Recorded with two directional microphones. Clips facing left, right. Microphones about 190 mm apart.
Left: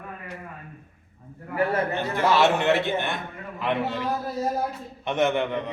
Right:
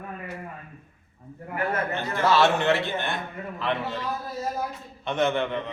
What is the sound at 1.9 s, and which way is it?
A man's voice, 15° left (ahead or behind).